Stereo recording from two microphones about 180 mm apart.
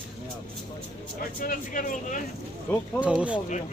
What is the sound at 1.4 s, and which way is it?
Speech, 50° left (ahead or behind).